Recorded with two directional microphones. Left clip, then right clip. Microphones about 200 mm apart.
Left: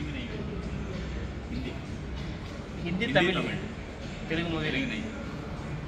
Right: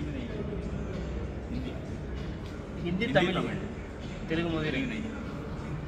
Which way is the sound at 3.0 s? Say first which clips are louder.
Left 1 dB; 15° right (ahead or behind).